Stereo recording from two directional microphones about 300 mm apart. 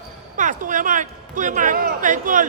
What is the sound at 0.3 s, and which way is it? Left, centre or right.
A man's voice, right.